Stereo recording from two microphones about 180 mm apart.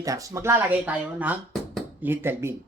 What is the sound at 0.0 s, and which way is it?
A man's voice, 20° right (ahead or behind).